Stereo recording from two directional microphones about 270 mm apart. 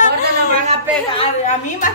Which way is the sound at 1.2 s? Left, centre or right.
Left.